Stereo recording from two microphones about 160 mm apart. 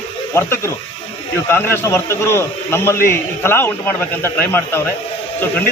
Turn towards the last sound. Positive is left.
turn(degrees=10)  # may be behind; listen again after turning